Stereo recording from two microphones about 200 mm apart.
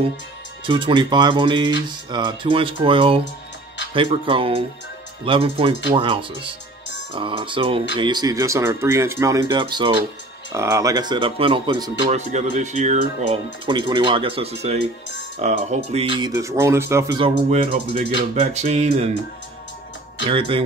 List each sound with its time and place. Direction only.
0.7 s speech: 25° right (ahead or behind)
12.5 s speech: 35° right (ahead or behind)
13.7 s speech: 25° right (ahead or behind)
16.3 s speech: 15° right (ahead or behind)
17.4 s speech: 30° right (ahead or behind)
20.2 s speech: 25° right (ahead or behind)